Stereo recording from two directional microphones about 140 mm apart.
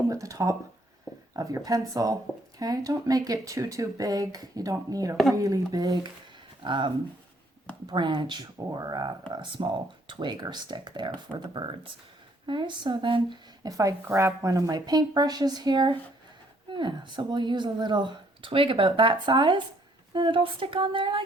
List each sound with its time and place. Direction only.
0.1 s speech: 25° right (ahead or behind)